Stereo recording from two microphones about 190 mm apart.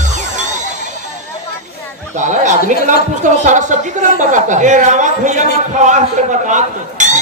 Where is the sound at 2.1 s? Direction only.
40° right (ahead or behind).